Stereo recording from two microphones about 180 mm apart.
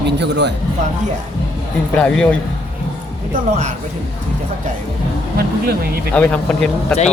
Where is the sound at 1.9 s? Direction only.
5° left (ahead or behind).